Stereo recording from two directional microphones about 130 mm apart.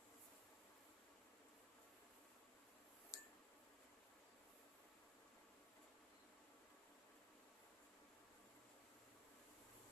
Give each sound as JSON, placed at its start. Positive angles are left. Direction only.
{"t": 3.1, "sound": "tick", "side_deg": 25}